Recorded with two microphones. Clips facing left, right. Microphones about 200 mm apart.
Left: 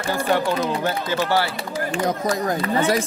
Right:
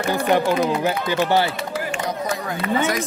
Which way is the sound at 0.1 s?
15° right (ahead or behind).